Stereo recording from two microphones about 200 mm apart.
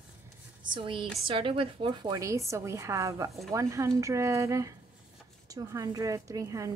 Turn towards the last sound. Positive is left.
turn(degrees=-15)  # may be behind; listen again after turning